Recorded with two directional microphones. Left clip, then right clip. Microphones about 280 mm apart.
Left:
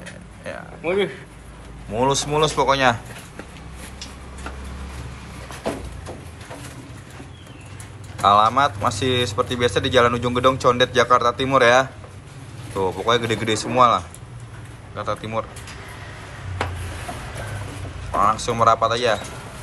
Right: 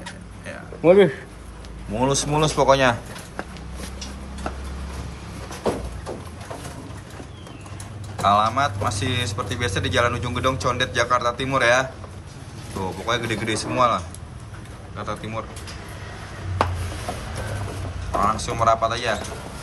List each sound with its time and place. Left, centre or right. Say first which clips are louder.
0.8 s speech: right 8 dB; right
2.0 s speech: left 2 dB; centre
8.2 s a man's voice: left 3 dB; centre
18.2 s a man's voice: left 3 dB; centre